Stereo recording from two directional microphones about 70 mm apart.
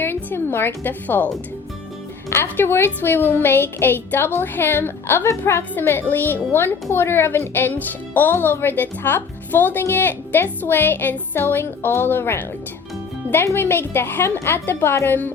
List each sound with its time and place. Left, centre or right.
0.0 s speech: left
2.3 s speech: left